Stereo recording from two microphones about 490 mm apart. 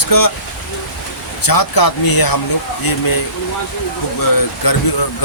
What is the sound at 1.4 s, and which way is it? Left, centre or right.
Speech, left.